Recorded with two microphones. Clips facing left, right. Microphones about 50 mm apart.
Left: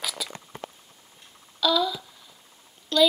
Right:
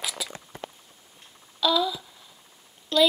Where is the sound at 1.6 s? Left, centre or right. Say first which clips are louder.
Even; centre.